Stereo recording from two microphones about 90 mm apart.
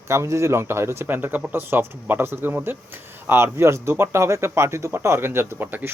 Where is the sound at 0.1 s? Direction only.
30° right (ahead or behind).